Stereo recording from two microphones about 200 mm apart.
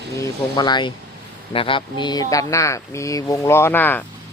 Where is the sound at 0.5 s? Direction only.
20° left (ahead or behind).